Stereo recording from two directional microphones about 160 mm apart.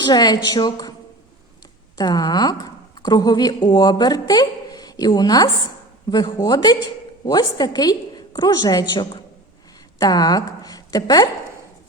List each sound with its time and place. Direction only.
0.0 s a woman's voice: 25° left (ahead or behind)
2.0 s a woman's voice: 25° left (ahead or behind)